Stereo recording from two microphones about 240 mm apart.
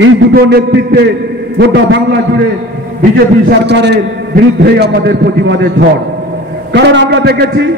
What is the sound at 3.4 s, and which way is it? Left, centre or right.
A man's voice, right.